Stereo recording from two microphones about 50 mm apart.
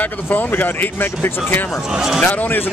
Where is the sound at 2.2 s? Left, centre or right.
Left.